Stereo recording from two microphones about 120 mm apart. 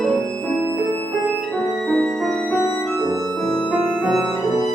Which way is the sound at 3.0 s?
30° right (ahead or behind).